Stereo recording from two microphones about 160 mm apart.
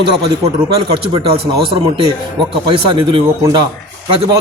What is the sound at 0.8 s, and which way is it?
Speech, 30° right (ahead or behind).